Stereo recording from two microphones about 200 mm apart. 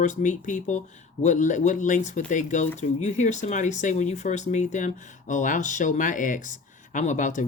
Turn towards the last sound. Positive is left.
turn(degrees=40)  # may be behind; listen again after turning